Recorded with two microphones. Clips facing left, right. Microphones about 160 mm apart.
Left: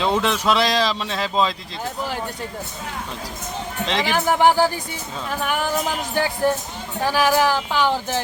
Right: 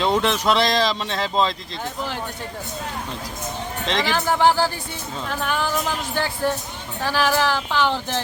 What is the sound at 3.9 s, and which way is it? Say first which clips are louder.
Speech: left 1 dB; 10° left (ahead or behind).